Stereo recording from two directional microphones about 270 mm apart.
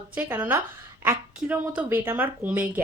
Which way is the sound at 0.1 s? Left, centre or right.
Centre.